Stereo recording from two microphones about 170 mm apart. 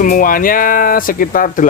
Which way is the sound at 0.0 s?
55° left (ahead or behind).